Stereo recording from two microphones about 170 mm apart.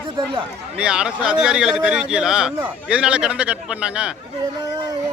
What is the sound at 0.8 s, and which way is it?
Speech, 5° right (ahead or behind).